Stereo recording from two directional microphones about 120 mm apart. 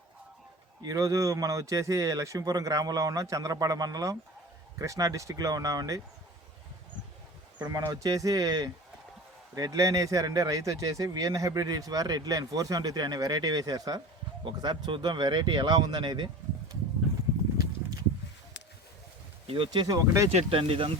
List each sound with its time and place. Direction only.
0.8 s speech: 30° right (ahead or behind)
7.7 s speech: 30° right (ahead or behind)
19.5 s speech: 45° right (ahead or behind)
19.9 s speech: 30° right (ahead or behind)
20.3 s speech: 50° right (ahead or behind)